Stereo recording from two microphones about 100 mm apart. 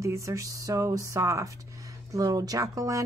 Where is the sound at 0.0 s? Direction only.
30° right (ahead or behind).